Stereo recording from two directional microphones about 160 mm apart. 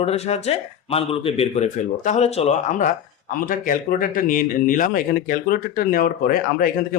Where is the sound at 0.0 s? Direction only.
40° left (ahead or behind).